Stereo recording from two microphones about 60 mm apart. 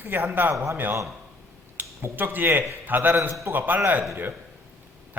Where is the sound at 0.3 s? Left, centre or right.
Right.